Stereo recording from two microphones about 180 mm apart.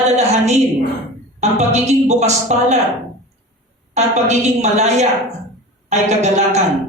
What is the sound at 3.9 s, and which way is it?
A woman's voice, 40° right (ahead or behind).